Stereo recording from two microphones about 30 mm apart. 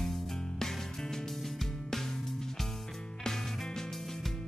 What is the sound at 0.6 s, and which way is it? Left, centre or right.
Music, centre.